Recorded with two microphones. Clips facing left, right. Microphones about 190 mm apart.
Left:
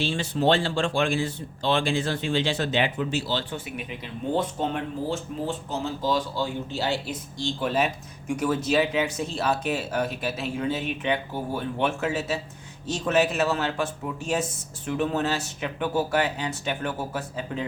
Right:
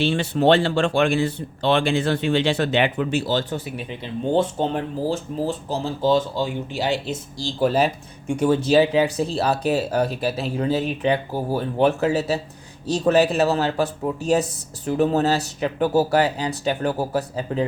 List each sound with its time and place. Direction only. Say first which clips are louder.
0.0 s speech: right 5 dB; 65° right (ahead or behind); by 3.6 s 45° right (ahead or behind)
3.8 s speech: right 5 dB; 30° right (ahead or behind)
7.3 s speech: right 5 dB; 35° right (ahead or behind)